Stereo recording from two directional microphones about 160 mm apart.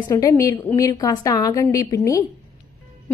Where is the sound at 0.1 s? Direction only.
15° left (ahead or behind).